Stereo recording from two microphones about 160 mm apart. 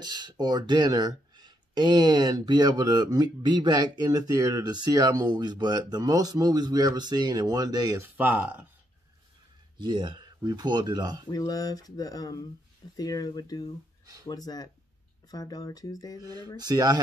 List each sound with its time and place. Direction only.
0.0 s speech: 25° right (ahead or behind)
8.2 s speech: 10° right (ahead or behind)
9.8 s speech: 30° right (ahead or behind)
11.2 s speech: 25° left (ahead or behind)
16.2 s speech: 25° right (ahead or behind)